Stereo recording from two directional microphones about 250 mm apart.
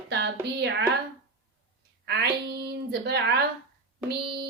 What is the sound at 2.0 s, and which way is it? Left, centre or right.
Child singing, right.